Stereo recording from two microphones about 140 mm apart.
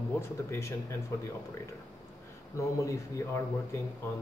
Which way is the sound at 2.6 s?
20° left (ahead or behind).